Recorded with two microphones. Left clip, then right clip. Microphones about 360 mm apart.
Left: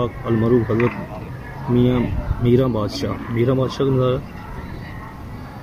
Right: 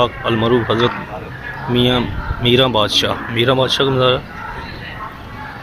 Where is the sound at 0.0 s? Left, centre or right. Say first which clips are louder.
Right 6 dB; right.